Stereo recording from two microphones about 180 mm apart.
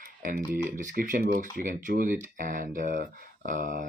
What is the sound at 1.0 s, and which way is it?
Speech, 55° right (ahead or behind).